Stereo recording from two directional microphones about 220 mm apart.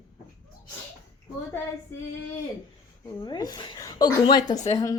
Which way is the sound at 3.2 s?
20° left (ahead or behind).